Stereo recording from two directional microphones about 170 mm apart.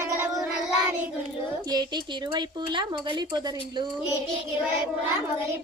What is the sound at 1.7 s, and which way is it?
Speech, 25° right (ahead or behind).